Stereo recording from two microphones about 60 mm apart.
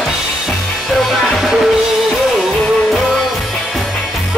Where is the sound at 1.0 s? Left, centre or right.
Centre.